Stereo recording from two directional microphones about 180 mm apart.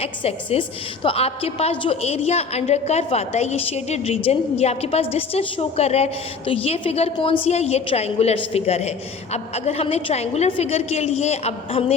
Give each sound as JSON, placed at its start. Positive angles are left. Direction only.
{"t": 0.0, "sound": "a woman's voice", "side_deg": 35}